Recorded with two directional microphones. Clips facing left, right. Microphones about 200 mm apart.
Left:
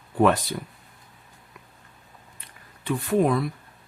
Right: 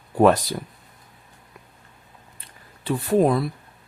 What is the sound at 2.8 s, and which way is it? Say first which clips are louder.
Speech: right 3 dB; 35° right (ahead or behind).